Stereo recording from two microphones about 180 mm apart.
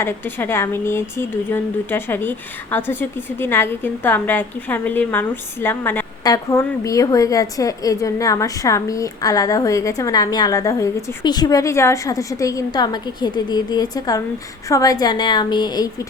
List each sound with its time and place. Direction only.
0.0 s a woman's voice: 15° left (ahead or behind)